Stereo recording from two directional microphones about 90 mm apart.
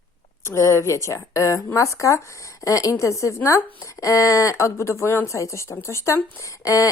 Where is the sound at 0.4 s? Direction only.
30° left (ahead or behind).